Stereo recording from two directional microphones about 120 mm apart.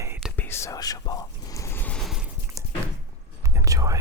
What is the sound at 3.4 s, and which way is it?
Whispering, 25° right (ahead or behind).